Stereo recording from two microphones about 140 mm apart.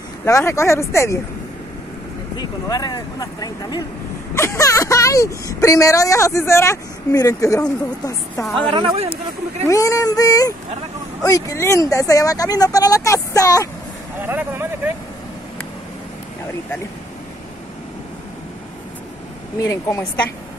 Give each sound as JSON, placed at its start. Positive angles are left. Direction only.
{"t": 0.2, "sound": "speech", "side_deg": 20}
{"t": 2.3, "sound": "speech", "side_deg": 30}
{"t": 8.5, "sound": "speech", "side_deg": -40}
{"t": 9.7, "sound": "speech", "side_deg": 25}
{"t": 14.2, "sound": "speech", "side_deg": -15}
{"t": 19.6, "sound": "speech", "side_deg": 25}